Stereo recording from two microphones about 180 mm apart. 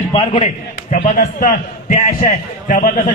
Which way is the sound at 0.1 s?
30° left (ahead or behind).